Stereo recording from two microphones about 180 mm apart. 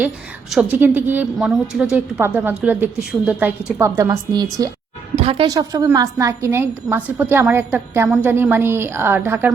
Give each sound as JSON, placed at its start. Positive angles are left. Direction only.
{"t": 0.5, "sound": "a woman's voice", "side_deg": -5}
{"t": 5.1, "sound": "speech", "side_deg": -30}
{"t": 5.5, "sound": "a woman's voice", "side_deg": -20}